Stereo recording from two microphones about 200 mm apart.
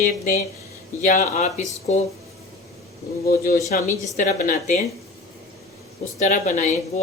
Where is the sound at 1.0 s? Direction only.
35° left (ahead or behind).